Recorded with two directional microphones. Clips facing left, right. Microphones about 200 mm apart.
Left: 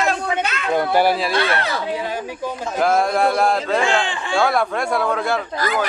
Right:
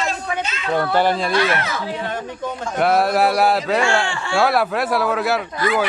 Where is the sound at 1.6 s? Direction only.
30° left (ahead or behind).